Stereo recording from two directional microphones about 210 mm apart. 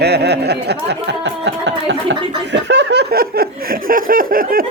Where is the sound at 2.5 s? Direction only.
55° right (ahead or behind).